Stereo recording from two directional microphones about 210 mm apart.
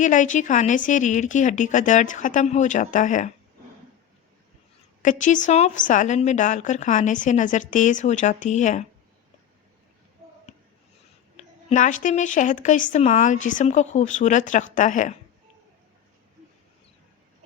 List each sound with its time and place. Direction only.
0.0 s speech: 35° left (ahead or behind)
5.0 s speech: 35° left (ahead or behind)
11.3 s speech: 35° left (ahead or behind)